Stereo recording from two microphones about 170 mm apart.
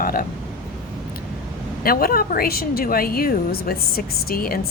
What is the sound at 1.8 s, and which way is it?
A woman's voice, 60° left (ahead or behind).